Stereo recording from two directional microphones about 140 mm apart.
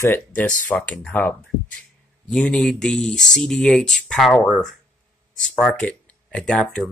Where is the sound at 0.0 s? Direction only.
15° left (ahead or behind).